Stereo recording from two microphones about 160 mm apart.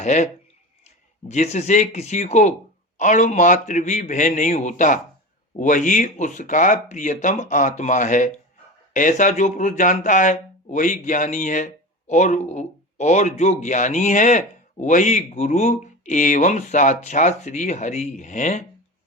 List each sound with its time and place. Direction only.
0.0 s speech: 45° left (ahead or behind)